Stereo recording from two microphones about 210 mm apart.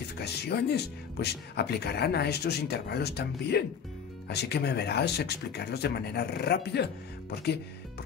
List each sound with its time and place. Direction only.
0.2 s speech: 50° left (ahead or behind)